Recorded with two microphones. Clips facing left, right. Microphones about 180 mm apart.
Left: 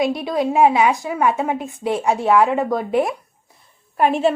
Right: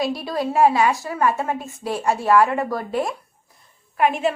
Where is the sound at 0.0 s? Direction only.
20° left (ahead or behind).